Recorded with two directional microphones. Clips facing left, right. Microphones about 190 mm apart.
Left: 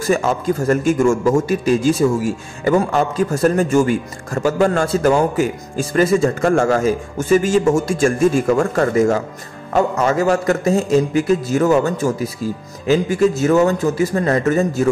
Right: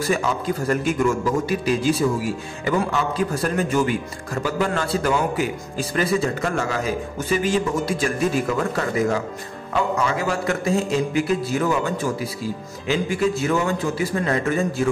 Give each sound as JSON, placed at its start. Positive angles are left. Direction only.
{"t": 0.0, "sound": "a man's voice", "side_deg": 45}